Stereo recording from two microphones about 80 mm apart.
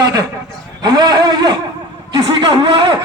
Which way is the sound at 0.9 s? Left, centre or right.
Right.